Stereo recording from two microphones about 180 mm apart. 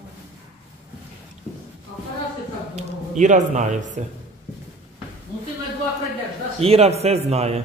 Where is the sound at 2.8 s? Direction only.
40° right (ahead or behind).